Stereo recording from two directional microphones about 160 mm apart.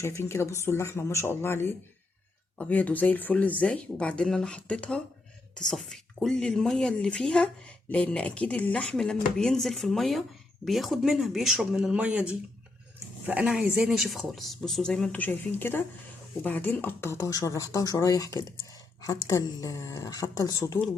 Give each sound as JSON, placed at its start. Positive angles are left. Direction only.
{"t": 0.0, "sound": "speech", "side_deg": 15}